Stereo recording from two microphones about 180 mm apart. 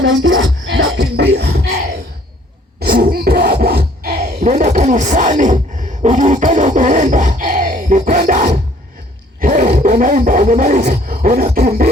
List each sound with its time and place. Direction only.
0.0 s music: 90° right; by 1.8 s 70° right (ahead or behind)
2.8 s a sound: 55° right (ahead or behind)
8.3 s filing: 40° right (ahead or behind)
9.4 s roar: 45° right (ahead or behind)
9.7 s roaring cats: 50° right (ahead or behind)